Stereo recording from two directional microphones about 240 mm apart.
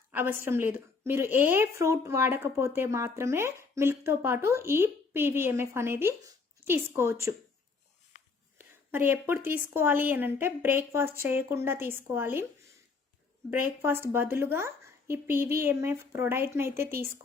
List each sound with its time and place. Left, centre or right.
0.1 s a woman's voice: centre
8.5 s a woman's voice: centre
13.5 s a woman's voice: centre